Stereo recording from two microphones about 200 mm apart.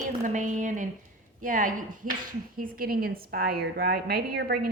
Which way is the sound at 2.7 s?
50° right (ahead or behind).